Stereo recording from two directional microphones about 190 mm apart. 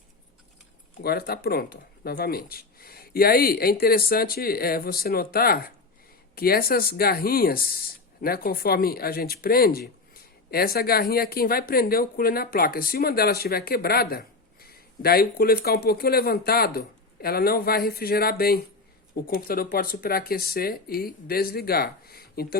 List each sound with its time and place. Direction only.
1.0 s speech: 55° left (ahead or behind)